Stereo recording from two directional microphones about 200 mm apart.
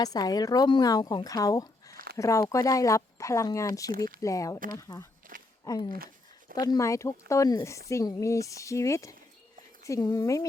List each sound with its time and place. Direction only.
0.0 s speech: 20° left (ahead or behind)
5.3 s a sound: 45° right (ahead or behind)
5.6 s speech: 20° left (ahead or behind)